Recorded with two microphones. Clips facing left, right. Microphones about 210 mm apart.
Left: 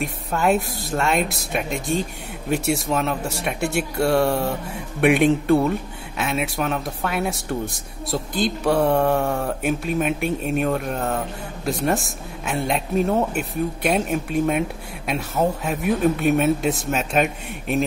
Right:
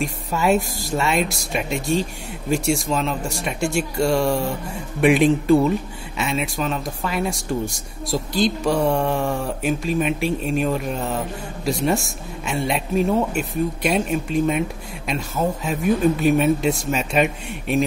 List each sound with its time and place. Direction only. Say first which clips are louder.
0.0 s speech: even; centre (ahead or behind)
15.6 s speech: right 1 dB; centre (ahead or behind)